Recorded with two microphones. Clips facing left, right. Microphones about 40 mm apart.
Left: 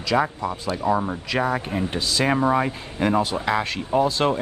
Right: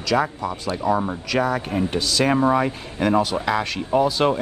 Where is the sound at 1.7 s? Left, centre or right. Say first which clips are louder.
Right 2 dB; centre.